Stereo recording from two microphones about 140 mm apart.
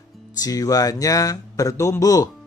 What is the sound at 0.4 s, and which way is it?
Speech, 25° left (ahead or behind).